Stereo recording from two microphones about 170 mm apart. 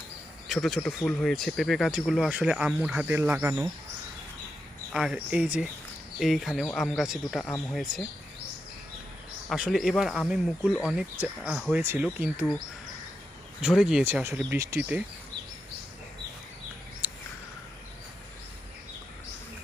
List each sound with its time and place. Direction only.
0.4 s speech: centre (ahead or behind)
4.9 s speech: 5° right (ahead or behind)
9.5 s speech: centre (ahead or behind)
13.6 s speech: 5° right (ahead or behind)
17.0 s a sound: 10° right (ahead or behind)